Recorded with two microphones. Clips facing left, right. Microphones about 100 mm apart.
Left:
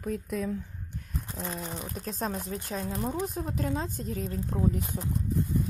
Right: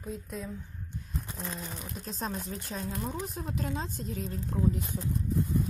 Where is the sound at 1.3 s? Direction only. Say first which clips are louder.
Left 5 dB; 5° left (ahead or behind).